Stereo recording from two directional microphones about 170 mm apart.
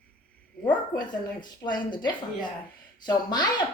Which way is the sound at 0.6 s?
25° left (ahead or behind).